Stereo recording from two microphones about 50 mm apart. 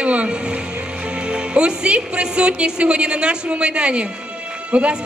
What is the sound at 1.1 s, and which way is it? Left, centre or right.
A woman's voice, centre.